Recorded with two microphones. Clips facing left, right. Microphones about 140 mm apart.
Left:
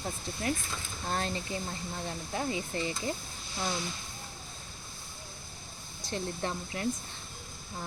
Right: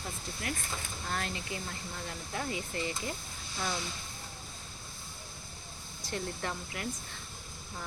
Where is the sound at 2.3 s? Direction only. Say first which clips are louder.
Left 3 dB; 25° left (ahead or behind).